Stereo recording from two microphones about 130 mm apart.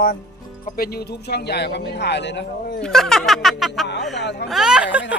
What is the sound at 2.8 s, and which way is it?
Speech, 5° left (ahead or behind).